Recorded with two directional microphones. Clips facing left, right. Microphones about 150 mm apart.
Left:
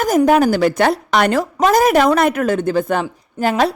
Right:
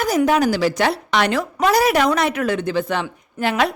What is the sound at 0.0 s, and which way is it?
A woman's voice, 45° left (ahead or behind).